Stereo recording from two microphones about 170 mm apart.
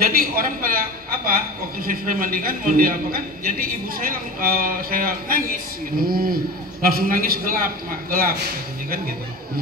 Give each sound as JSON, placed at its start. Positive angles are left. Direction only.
{"t": 0.0, "sound": "a woman's voice", "side_deg": -60}